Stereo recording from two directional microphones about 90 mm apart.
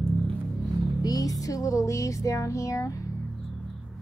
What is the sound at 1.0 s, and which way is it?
Music, 45° left (ahead or behind).